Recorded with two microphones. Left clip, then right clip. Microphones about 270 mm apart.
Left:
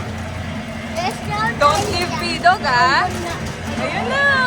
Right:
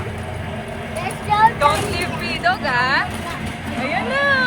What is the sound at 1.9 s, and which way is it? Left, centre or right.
Speech, centre.